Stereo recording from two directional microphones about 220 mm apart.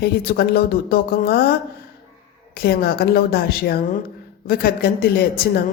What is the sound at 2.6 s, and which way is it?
A woman's voice, 45° left (ahead or behind).